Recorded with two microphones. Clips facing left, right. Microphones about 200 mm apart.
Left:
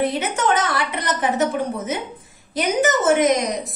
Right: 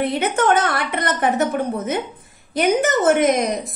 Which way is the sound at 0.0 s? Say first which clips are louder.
Right 2 dB; 60° right (ahead or behind).